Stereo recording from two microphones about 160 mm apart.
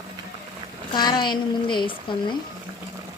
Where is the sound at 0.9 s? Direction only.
25° left (ahead or behind).